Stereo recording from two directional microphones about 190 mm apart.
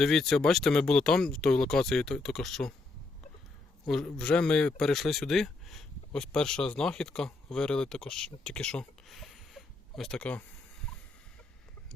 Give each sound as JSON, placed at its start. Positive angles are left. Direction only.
{"t": 0.0, "sound": "speech", "side_deg": 0}
{"t": 3.8, "sound": "speech", "side_deg": 5}
{"t": 8.4, "sound": "a sound", "side_deg": 5}